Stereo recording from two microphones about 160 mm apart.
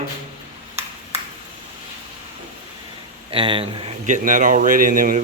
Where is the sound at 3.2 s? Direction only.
30° right (ahead or behind).